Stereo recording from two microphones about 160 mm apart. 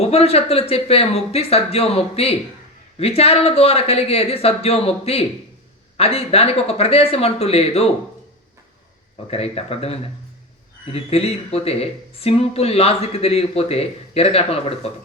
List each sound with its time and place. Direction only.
0.0 s speech: 40° left (ahead or behind)
9.2 s speech: 40° left (ahead or behind)